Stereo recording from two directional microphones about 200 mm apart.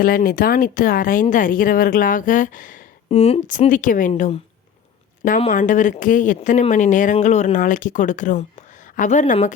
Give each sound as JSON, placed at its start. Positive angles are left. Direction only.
{"t": 0.0, "sound": "speech", "side_deg": 45}
{"t": 5.4, "sound": "speech", "side_deg": 40}